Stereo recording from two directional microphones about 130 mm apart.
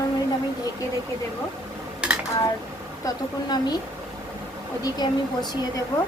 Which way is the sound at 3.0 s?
30° left (ahead or behind).